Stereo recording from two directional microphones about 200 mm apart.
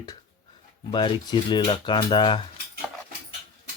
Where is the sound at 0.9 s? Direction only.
20° left (ahead or behind).